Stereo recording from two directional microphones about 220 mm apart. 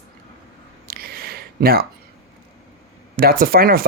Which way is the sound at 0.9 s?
45° right (ahead or behind).